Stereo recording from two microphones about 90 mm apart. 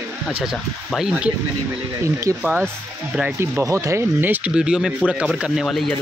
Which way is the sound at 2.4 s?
15° right (ahead or behind).